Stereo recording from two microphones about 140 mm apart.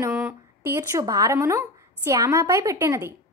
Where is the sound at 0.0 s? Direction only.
10° right (ahead or behind).